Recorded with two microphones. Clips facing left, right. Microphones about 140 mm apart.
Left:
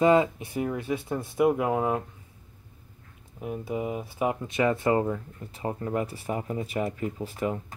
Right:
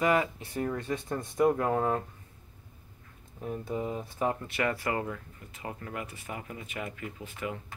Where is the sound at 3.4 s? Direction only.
10° left (ahead or behind); by 7.7 s 40° left (ahead or behind).